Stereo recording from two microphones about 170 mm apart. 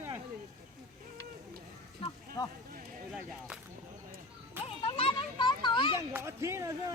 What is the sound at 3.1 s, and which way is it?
Speech, 5° right (ahead or behind).